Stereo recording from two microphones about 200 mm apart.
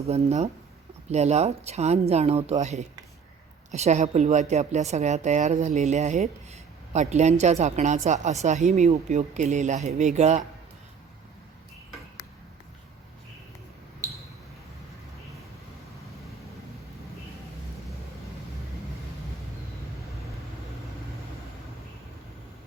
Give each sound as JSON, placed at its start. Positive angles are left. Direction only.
{"t": 0.0, "sound": "a woman's voice", "side_deg": -30}